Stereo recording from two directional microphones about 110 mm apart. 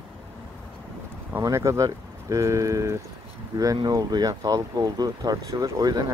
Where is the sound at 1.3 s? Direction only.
25° right (ahead or behind).